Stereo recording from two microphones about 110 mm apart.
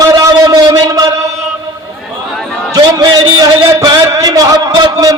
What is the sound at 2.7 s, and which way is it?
A man's voice, 40° right (ahead or behind).